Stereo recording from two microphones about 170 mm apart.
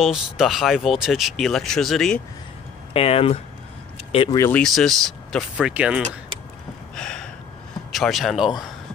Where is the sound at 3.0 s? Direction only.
35° left (ahead or behind).